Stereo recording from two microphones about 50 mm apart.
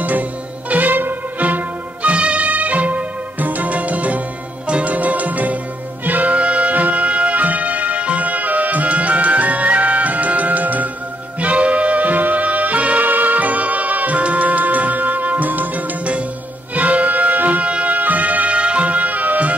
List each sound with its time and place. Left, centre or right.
0.0 s music: right